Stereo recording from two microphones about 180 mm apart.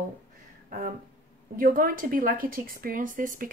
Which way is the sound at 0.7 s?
50° right (ahead or behind).